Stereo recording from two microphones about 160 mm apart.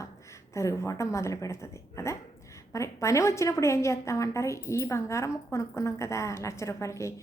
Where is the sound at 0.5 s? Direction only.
20° left (ahead or behind).